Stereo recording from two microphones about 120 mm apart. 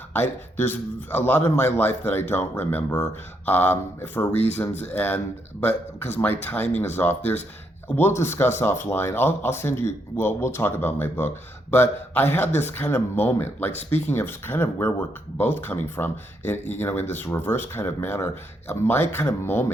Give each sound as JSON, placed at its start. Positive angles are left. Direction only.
{"t": 0.1, "sound": "a man's voice", "side_deg": 20}